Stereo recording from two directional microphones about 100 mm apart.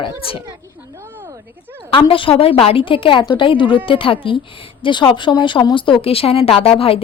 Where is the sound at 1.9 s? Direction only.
60° left (ahead or behind).